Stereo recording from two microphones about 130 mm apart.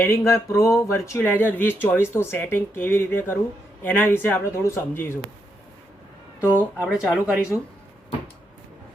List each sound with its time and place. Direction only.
0.0 s speech: 20° left (ahead or behind)
6.5 s speech: 15° right (ahead or behind)